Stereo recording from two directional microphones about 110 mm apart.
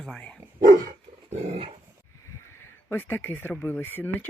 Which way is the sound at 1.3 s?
70° right (ahead or behind).